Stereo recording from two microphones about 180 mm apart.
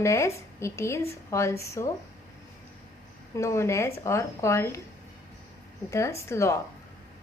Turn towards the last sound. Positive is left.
turn(degrees=15)  # may be behind; listen again after turning